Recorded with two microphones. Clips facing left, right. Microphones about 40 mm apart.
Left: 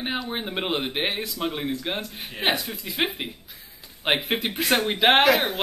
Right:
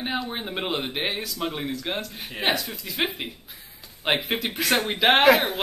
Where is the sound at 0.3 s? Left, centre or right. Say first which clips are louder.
Left 1 dB; centre.